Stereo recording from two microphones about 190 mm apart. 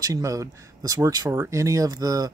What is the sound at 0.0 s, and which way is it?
Speech, 15° right (ahead or behind).